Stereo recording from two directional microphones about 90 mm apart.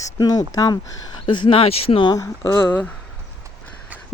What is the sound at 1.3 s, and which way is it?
Speech, 65° left (ahead or behind).